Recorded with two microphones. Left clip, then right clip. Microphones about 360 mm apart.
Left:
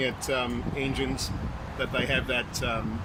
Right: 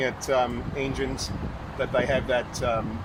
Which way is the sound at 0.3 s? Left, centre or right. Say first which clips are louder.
Right 5 dB; right.